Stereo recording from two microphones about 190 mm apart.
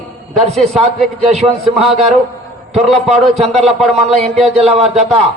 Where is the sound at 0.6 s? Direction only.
35° right (ahead or behind).